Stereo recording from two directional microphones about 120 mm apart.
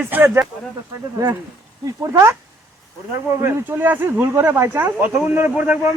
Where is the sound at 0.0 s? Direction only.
15° right (ahead or behind).